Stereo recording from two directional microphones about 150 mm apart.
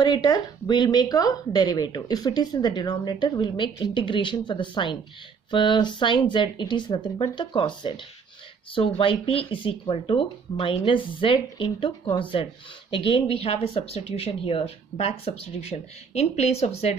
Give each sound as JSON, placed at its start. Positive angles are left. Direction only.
{"t": 0.0, "sound": "speech", "side_deg": 25}